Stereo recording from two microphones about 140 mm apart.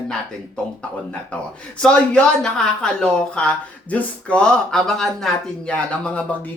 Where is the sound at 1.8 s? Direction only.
5° left (ahead or behind).